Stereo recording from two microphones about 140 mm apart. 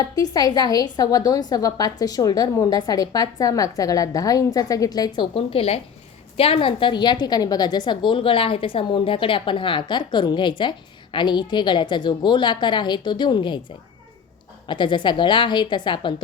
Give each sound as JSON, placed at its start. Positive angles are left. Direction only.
{"t": 0.0, "sound": "a woman's voice", "side_deg": 30}
{"t": 14.7, "sound": "a woman's voice", "side_deg": 35}